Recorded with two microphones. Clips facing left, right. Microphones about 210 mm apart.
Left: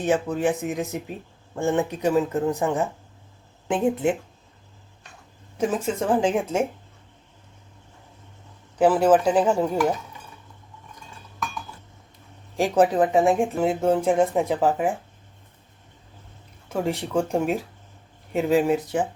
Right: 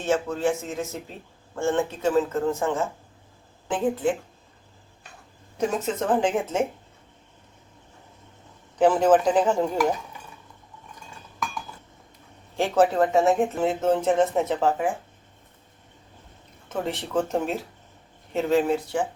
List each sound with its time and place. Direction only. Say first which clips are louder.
0.0 s speech: left 2 dB; 15° left (ahead or behind)
5.5 s speech: left 1 dB; 5° left (ahead or behind)
8.8 s speech: left 1 dB; 10° left (ahead or behind)
12.7 s speech: left 1 dB; 15° left (ahead or behind)
16.6 s speech: left 3 dB; 10° left (ahead or behind)